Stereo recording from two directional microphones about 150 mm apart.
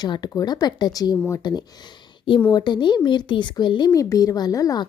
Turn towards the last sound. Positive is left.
turn(degrees=25)  # may be behind; listen again after turning